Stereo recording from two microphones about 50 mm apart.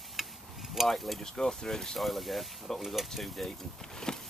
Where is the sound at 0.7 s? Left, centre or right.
Centre.